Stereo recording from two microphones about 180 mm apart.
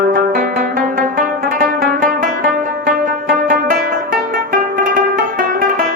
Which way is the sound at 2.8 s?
50° right (ahead or behind).